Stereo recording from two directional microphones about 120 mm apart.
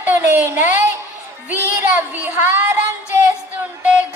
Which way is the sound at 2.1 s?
15° right (ahead or behind).